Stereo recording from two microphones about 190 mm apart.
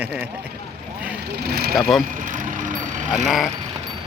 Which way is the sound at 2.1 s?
40° right (ahead or behind).